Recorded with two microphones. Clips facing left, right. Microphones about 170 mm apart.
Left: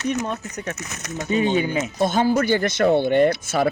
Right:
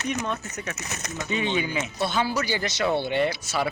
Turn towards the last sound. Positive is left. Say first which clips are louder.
# left 7 dB
turn(degrees=50)  # may be behind; listen again after turning